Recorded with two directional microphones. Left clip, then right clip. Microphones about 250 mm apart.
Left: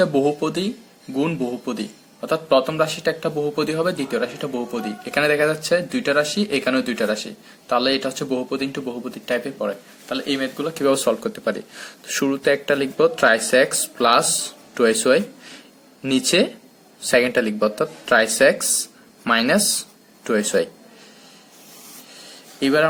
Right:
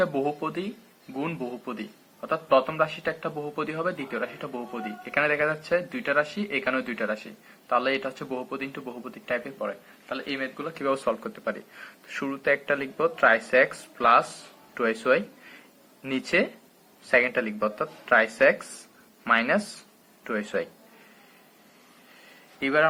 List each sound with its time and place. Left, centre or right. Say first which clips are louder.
0.0 s speech: left 7 dB; left
22.6 s speech: left 5 dB; left